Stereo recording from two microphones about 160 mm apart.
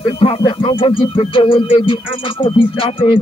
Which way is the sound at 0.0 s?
35° left (ahead or behind).